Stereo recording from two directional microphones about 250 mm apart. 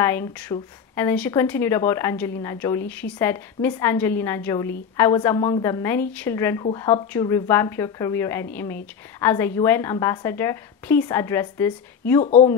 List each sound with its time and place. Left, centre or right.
0.0 s a woman's voice: centre
12.2 s speech: left